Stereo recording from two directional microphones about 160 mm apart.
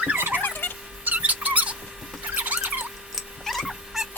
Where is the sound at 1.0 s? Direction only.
10° right (ahead or behind).